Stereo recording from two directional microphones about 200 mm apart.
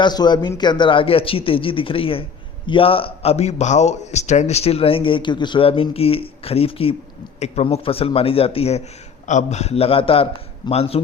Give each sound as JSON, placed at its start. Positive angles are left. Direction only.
{"t": 0.0, "sound": "a man's voice", "side_deg": 20}